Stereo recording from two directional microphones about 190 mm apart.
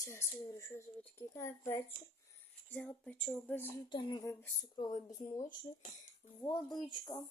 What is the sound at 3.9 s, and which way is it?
Speech, 25° left (ahead or behind).